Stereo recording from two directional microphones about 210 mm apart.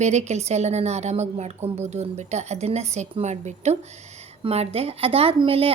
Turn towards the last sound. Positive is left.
turn(degrees=-25)  # may be behind; listen again after turning